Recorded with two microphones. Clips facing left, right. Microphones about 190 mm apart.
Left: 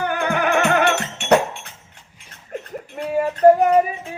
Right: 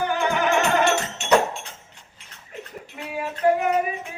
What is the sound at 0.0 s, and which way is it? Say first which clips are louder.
Music: left 1 dB; 60° left (ahead or behind).